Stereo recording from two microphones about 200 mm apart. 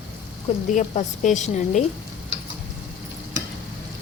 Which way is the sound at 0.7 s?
40° left (ahead or behind).